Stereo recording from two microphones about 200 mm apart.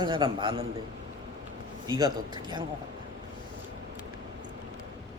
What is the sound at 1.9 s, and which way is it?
Speech, 20° right (ahead or behind).